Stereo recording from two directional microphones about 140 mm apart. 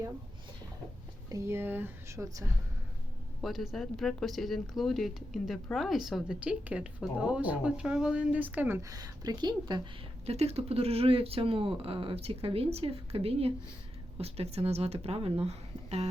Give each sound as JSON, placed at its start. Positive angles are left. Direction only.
{"t": 1.3, "sound": "speech", "side_deg": -20}
{"t": 3.4, "sound": "a woman's voice", "side_deg": 0}
{"t": 8.8, "sound": "speech", "side_deg": -25}
{"t": 10.2, "sound": "speech", "side_deg": -45}